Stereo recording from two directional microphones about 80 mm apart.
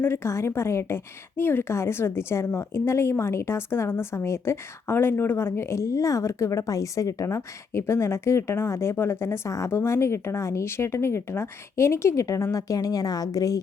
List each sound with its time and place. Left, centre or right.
0.0 s a woman's voice: left